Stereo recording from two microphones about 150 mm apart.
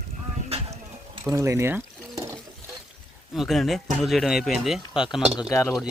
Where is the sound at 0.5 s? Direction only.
40° right (ahead or behind).